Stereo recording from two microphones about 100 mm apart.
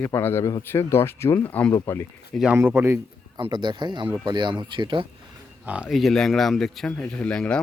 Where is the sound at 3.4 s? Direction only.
50° right (ahead or behind).